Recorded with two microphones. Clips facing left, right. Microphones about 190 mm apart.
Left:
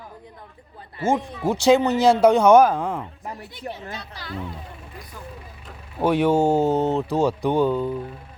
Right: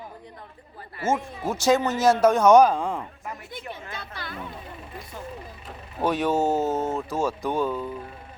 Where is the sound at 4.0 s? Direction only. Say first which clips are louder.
Left 2 dB; 55° right (ahead or behind).